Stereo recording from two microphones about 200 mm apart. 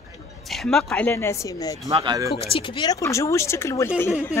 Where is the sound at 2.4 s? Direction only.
25° left (ahead or behind).